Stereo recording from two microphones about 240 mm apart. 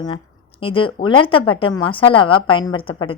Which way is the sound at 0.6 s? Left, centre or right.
Left.